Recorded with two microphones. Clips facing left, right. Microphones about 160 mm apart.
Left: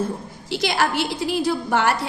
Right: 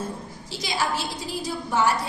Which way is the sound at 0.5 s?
65° left (ahead or behind).